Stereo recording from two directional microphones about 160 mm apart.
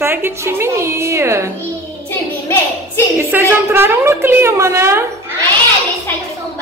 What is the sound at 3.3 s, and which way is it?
A woman's voice, 15° right (ahead or behind).